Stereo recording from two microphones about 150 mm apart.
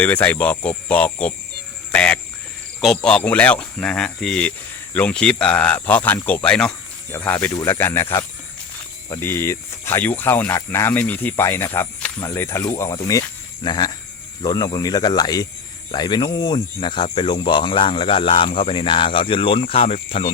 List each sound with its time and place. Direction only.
0.0 s speech: 10° left (ahead or behind)
9.2 s speech: 15° left (ahead or behind); by 20.3 s 40° left (ahead or behind)